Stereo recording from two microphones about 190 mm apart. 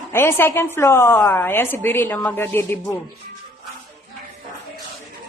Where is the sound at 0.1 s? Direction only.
10° left (ahead or behind).